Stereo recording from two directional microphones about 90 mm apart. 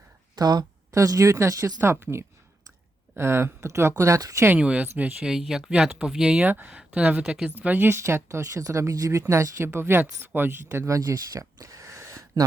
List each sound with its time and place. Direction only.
0.3 s a sound: 50° right (ahead or behind)
0.9 s a woman's voice: 40° right (ahead or behind)
4.4 s speech: 15° right (ahead or behind)
5.3 s speech: 5° right (ahead or behind); by 12.4 s 35° right (ahead or behind)